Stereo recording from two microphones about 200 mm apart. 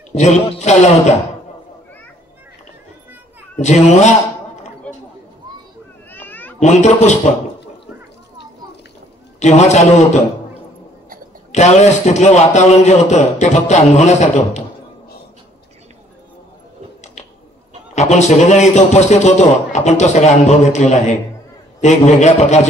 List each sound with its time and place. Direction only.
0.1 s a man's voice: 35° left (ahead or behind)
3.6 s a man's voice: 35° left (ahead or behind)
4.9 s a sound: 5° left (ahead or behind)
6.1 s cat: 10° left (ahead or behind)
6.6 s a man's voice: 35° left (ahead or behind)
9.4 s a man's voice: 35° left (ahead or behind)
11.5 s a man's voice: 35° left (ahead or behind)
17.9 s a man's voice: 35° left (ahead or behind)